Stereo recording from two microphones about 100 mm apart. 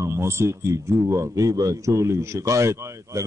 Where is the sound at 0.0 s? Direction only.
25° right (ahead or behind).